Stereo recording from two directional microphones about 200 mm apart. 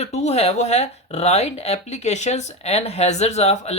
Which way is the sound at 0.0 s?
35° left (ahead or behind).